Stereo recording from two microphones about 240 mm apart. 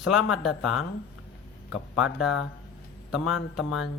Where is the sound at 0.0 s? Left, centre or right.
Centre.